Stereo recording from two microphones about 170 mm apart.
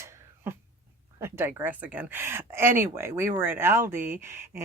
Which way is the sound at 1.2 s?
15° right (ahead or behind).